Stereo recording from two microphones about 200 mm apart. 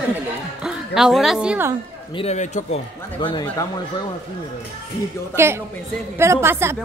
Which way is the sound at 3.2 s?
20° left (ahead or behind).